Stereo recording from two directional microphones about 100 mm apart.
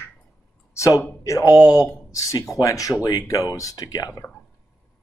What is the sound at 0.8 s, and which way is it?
Speech, 30° left (ahead or behind).